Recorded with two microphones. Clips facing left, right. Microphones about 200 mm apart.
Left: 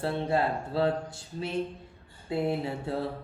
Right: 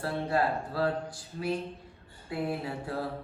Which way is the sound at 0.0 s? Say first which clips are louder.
Left 1 dB; 25° left (ahead or behind).